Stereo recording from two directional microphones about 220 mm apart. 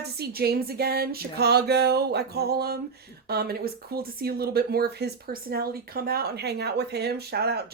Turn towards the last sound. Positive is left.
turn(degrees=-45)  # may be behind; listen again after turning